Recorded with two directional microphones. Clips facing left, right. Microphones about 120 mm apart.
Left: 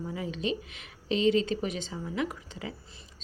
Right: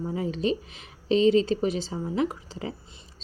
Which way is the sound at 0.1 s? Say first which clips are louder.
Right 6 dB; 35° right (ahead or behind).